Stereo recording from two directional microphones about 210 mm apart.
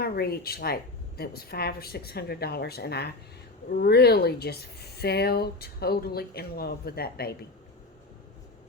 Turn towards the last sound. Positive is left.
turn(degrees=45)  # may be behind; listen again after turning